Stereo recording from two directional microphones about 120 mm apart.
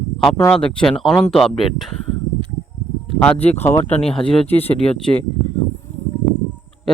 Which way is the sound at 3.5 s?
20° left (ahead or behind).